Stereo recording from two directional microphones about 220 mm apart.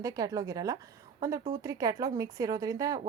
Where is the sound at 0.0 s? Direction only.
15° right (ahead or behind).